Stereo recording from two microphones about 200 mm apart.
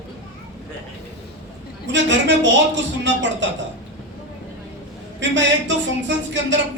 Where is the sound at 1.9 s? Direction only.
65° right (ahead or behind).